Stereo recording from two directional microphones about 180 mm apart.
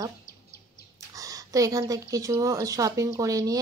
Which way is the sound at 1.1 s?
20° right (ahead or behind).